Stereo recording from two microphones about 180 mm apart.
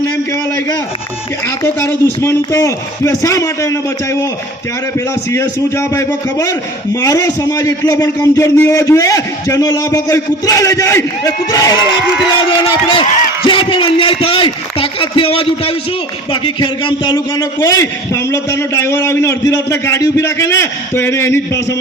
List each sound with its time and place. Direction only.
1.6 s a man's voice: 15° left (ahead or behind)